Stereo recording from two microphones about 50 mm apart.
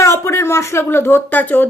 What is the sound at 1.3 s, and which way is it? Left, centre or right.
Speech, left.